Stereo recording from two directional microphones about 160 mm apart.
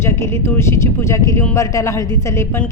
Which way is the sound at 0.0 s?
15° left (ahead or behind).